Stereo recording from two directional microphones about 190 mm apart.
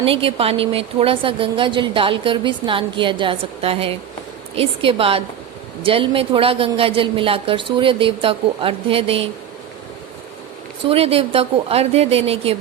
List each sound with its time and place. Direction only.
0.0 s a woman's voice: 30° right (ahead or behind)
10.8 s a woman's voice: 30° right (ahead or behind)